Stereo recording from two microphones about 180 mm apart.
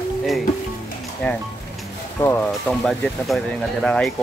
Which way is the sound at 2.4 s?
Centre (ahead or behind).